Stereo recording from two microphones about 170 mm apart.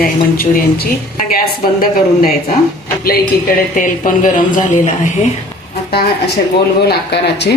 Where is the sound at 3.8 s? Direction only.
50° left (ahead or behind).